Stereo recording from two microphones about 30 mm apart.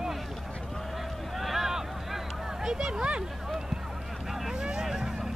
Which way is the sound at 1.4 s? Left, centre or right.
Centre.